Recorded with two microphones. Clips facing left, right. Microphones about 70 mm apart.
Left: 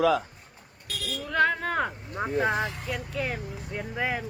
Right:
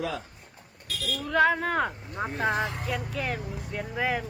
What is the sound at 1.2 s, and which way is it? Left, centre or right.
Speech, centre.